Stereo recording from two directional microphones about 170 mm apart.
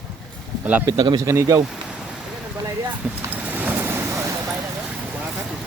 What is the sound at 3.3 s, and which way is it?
Vehicle, 10° right (ahead or behind).